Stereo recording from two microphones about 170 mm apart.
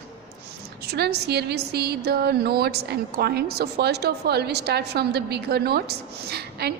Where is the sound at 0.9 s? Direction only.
70° right (ahead or behind).